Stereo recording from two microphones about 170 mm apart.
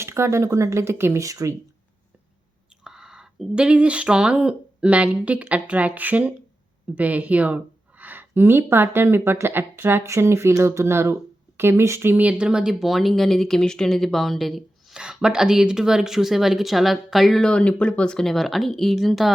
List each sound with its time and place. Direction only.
0.0 s speech: 15° right (ahead or behind)
2.8 s speech: 5° right (ahead or behind)